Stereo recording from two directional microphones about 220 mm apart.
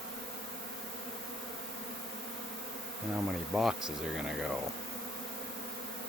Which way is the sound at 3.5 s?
Centre (ahead or behind).